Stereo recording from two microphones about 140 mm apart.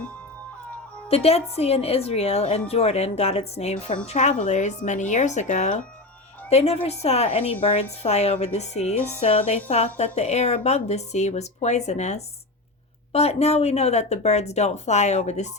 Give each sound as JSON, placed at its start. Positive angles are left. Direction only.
{"t": 1.0, "sound": "a woman's voice", "side_deg": 45}